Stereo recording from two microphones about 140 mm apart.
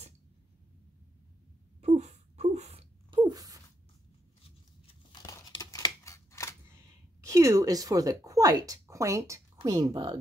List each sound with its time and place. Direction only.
1.8 s a sound: 55° right (ahead or behind); by 3.6 s 25° right (ahead or behind)
5.2 s crumpling: 15° left (ahead or behind)
5.6 s typewriter: 25° left (ahead or behind)
7.2 s speech: 25° right (ahead or behind)